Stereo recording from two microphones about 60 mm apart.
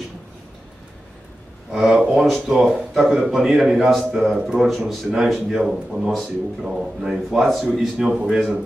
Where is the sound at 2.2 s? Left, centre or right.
Centre.